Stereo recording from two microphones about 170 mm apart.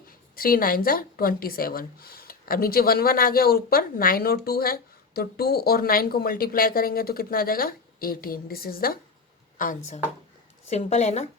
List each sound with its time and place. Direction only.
0.3 s speech: 60° left (ahead or behind)
10.7 s a woman's voice: 40° left (ahead or behind)